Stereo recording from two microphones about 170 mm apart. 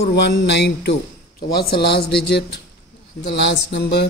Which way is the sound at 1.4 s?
65° left (ahead or behind).